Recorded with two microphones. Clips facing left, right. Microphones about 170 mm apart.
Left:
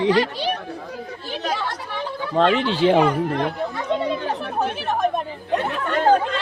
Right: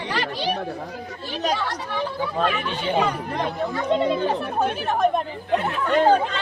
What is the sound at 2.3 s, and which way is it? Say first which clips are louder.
Speech: left 9 dB; 90° left.